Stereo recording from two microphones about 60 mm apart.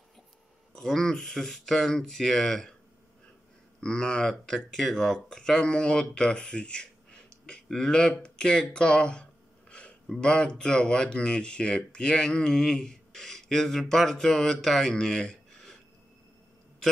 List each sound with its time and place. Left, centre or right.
0.7 s speech: centre
3.8 s speech: centre
8.1 s a sound: centre
10.2 s speech: centre